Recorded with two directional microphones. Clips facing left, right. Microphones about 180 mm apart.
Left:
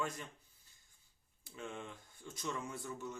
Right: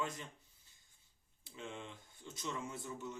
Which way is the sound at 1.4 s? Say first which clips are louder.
Left 2 dB; 25° right (ahead or behind).